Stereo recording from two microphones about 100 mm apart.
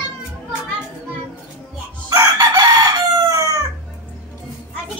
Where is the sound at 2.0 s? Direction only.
40° right (ahead or behind).